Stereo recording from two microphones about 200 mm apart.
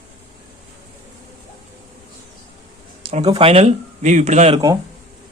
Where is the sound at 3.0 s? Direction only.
25° right (ahead or behind).